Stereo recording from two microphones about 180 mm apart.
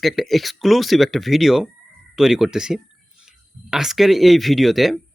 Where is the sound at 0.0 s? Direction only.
Centre (ahead or behind).